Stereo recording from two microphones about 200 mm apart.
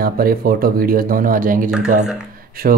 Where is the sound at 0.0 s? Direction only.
45° right (ahead or behind).